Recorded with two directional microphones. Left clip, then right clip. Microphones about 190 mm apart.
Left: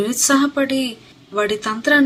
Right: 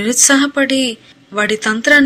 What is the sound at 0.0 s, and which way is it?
Speech, 30° right (ahead or behind).